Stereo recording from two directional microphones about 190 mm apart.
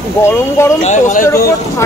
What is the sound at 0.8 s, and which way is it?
Speech, 40° left (ahead or behind).